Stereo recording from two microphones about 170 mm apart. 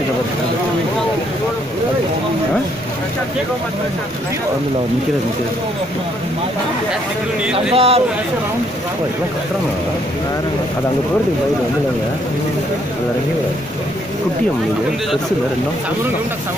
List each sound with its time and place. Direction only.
7.7 s a man's voice: 35° right (ahead or behind)